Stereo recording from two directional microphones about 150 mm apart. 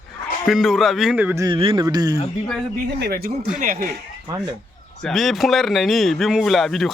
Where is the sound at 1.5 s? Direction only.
35° right (ahead or behind).